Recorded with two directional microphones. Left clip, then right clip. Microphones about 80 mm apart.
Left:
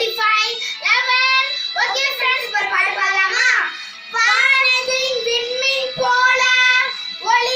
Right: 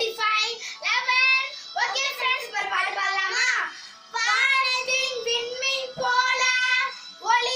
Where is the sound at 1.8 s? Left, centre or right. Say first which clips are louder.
Left 6 dB; centre.